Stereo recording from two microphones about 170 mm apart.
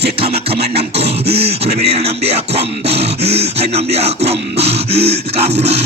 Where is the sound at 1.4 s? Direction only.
35° right (ahead or behind).